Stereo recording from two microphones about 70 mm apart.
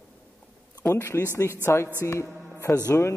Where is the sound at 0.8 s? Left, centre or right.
Left.